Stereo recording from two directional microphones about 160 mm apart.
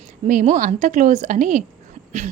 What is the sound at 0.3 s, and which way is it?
Speech, 50° right (ahead or behind).